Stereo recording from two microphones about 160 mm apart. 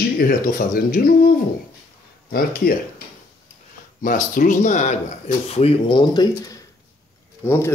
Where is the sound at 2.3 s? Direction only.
65° left (ahead or behind).